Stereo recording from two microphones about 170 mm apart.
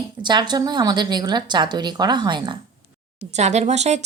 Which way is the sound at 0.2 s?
25° right (ahead or behind).